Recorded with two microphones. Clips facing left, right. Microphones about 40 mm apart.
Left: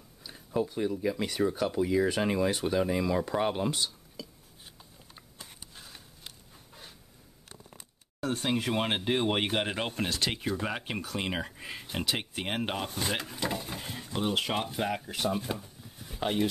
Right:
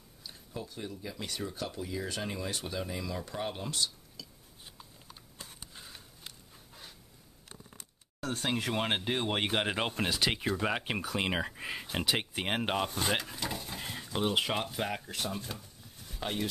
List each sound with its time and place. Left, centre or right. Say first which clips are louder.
0.6 s speech: left 11 dB; left
1.8 s speech: left 12 dB; left
5.8 s a sound: even; centre
8.2 s speech: left 3 dB; centre
9.6 s speech: even; centre
13.4 s speech: left 4 dB; centre
13.7 s bird: left 1 dB; centre
14.1 s speech: left 1 dB; centre
15.2 s a sound: left 7 dB; centre